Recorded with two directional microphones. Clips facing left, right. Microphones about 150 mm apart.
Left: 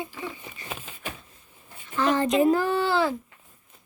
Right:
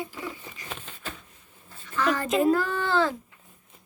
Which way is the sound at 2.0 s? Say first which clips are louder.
Left 3 dB; 25° left (ahead or behind).